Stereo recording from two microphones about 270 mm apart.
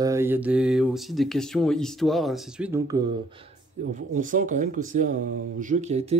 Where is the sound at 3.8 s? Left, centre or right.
Right.